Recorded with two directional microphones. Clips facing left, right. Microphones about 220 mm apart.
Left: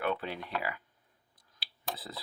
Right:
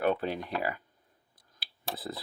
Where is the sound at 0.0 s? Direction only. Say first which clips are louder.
Right 5 dB; 40° right (ahead or behind).